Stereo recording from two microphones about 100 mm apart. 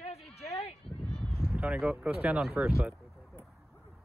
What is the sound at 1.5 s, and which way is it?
Speech, 5° right (ahead or behind).